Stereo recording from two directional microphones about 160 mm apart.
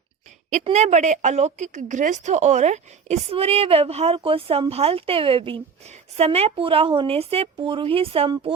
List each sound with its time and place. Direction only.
0.6 s a woman's voice: 45° right (ahead or behind)